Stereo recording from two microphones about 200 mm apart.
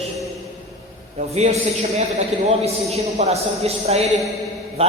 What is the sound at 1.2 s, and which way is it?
Speech, 35° right (ahead or behind).